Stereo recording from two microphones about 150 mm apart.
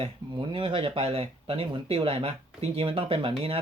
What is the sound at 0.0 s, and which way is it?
Speech, 35° right (ahead or behind).